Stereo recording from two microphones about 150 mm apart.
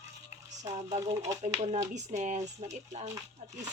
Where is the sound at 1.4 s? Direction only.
45° right (ahead or behind).